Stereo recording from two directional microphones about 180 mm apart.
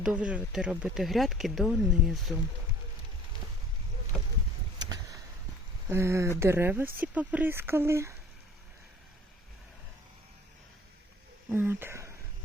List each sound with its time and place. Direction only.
0.0 s speech: 5° right (ahead or behind)
5.9 s speech: 15° right (ahead or behind)
11.4 s speech: 10° right (ahead or behind)